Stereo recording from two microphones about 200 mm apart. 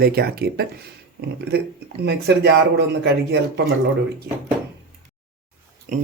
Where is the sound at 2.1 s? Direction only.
55° right (ahead or behind).